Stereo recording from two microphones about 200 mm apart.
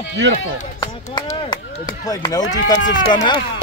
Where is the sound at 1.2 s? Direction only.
25° left (ahead or behind).